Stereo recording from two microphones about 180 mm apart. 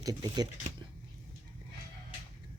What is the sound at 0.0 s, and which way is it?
Speech, 20° right (ahead or behind).